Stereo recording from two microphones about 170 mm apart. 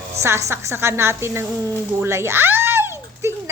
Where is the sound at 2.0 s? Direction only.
15° right (ahead or behind).